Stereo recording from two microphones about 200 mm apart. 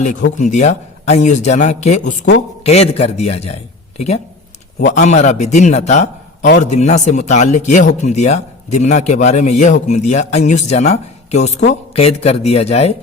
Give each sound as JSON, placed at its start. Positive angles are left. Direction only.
{"t": 0.3, "sound": "a man's voice", "side_deg": 35}